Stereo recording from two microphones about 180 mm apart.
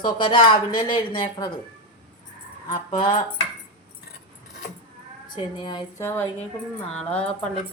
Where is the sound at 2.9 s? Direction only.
30° left (ahead or behind).